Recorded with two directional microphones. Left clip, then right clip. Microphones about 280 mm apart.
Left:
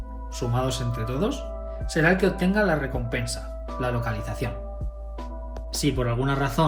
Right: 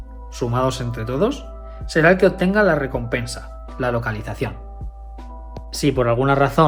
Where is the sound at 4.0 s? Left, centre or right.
Centre.